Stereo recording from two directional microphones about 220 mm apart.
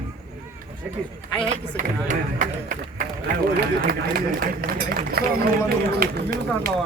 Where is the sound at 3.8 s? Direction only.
40° right (ahead or behind).